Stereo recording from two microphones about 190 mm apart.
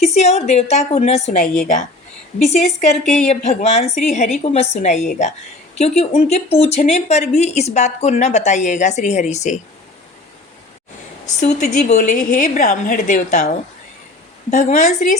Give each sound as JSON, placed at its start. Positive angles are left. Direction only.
{"t": 0.1, "sound": "a woman's voice", "side_deg": 35}
{"t": 2.4, "sound": "a woman's voice", "side_deg": 35}
{"t": 3.0, "sound": "a woman's voice", "side_deg": 0}
{"t": 3.2, "sound": "a woman's voice", "side_deg": 35}
{"t": 11.3, "sound": "a woman's voice", "side_deg": 40}
{"t": 14.5, "sound": "a woman's voice", "side_deg": 40}